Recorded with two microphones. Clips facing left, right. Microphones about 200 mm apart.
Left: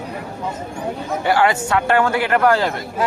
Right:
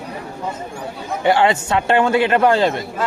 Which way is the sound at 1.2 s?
25° right (ahead or behind).